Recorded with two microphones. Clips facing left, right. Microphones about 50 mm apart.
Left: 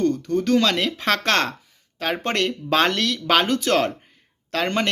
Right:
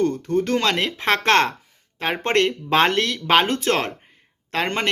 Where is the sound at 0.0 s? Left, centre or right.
Right.